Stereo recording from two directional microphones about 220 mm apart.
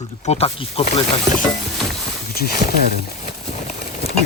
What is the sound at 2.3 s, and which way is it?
Speech, 45° left (ahead or behind).